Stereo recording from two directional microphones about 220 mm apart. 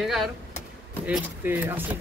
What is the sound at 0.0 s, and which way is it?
Speech, centre (ahead or behind).